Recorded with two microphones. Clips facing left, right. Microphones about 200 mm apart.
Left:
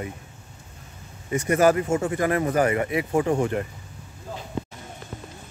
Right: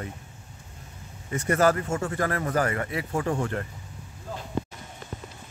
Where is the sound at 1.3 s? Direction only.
15° left (ahead or behind).